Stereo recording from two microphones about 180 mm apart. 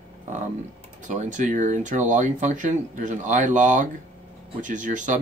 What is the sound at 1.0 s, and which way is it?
Speech, 45° right (ahead or behind).